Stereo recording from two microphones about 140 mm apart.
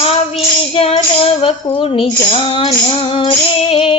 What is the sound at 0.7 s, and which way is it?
Music, 45° left (ahead or behind).